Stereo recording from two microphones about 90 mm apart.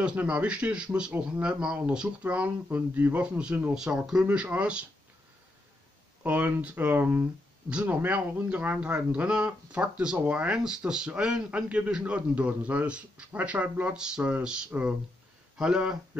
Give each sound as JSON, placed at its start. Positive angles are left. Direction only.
{"t": 0.0, "sound": "a man's voice", "side_deg": -15}
{"t": 6.2, "sound": "a man's voice", "side_deg": -15}